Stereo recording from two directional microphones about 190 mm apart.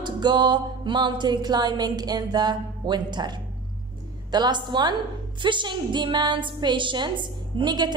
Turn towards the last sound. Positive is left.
turn(degrees=-25)  # may be behind; listen again after turning